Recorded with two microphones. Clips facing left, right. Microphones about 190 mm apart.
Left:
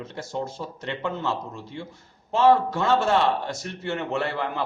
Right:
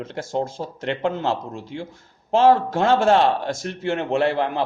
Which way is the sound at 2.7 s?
90° right.